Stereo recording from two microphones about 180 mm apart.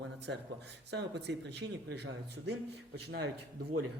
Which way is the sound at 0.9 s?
70° right (ahead or behind).